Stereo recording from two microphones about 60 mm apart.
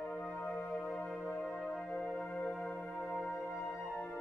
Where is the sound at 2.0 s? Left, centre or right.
Centre.